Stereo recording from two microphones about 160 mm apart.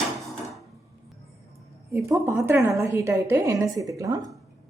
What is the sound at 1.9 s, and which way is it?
A woman's voice, 20° right (ahead or behind).